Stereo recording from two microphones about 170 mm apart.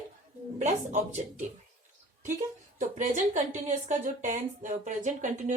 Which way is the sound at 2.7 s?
45° right (ahead or behind).